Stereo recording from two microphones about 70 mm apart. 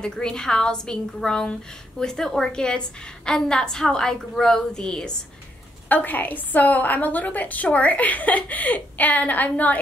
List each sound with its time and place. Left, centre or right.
0.0 s a woman's voice: centre
5.9 s a woman's voice: left